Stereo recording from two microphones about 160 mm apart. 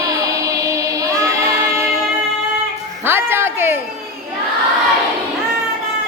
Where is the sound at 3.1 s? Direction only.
15° right (ahead or behind).